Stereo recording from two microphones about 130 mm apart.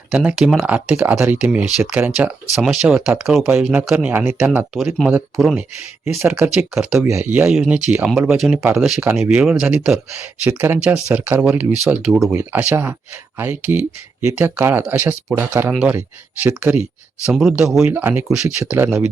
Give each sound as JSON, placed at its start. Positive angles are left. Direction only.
{"t": 0.1, "sound": "speech", "side_deg": -5}
{"t": 4.7, "sound": "speech", "side_deg": 0}
{"t": 6.4, "sound": "speech", "side_deg": -10}
{"t": 7.1, "sound": "speech", "side_deg": -20}